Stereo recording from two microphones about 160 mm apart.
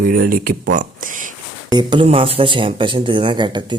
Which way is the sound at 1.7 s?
30° right (ahead or behind).